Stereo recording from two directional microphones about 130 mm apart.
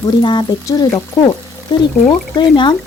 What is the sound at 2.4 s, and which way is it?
Speech, 35° left (ahead or behind).